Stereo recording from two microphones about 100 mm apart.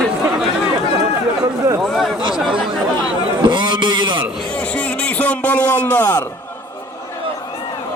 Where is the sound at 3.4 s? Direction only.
50° right (ahead or behind).